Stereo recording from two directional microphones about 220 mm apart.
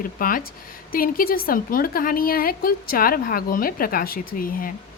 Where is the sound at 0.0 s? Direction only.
40° left (ahead or behind).